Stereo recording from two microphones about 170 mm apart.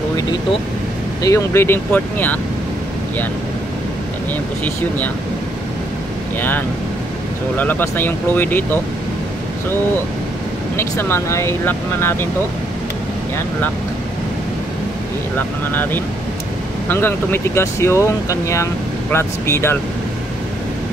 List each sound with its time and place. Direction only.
1.2 s speech: 15° left (ahead or behind)
4.6 s speech: 10° left (ahead or behind)
7.5 s speech: 10° left (ahead or behind)
10.8 s speech: 15° left (ahead or behind)
15.3 s speech: 10° left (ahead or behind)